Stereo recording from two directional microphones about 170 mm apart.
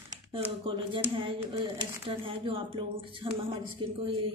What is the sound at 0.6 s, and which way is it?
A woman's voice, 30° right (ahead or behind).